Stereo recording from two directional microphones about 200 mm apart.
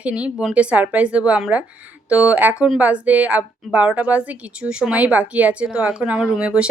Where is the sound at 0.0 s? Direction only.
5° right (ahead or behind).